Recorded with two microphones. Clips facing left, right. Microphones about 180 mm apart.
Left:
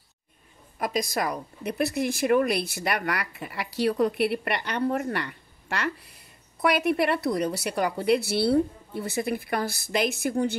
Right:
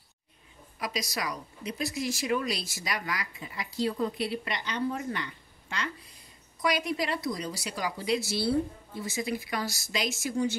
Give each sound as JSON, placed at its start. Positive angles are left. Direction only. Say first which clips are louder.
{"t": 0.7, "sound": "a woman's voice", "louder": "left 7 dB", "side_deg": 50}